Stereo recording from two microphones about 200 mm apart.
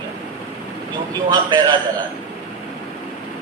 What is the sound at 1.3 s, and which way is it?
Speech, 20° right (ahead or behind).